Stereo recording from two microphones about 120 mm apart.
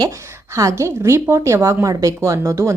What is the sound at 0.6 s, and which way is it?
Speech, 25° right (ahead or behind).